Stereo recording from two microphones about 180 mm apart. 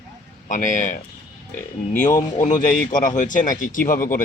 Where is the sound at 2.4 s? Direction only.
45° left (ahead or behind).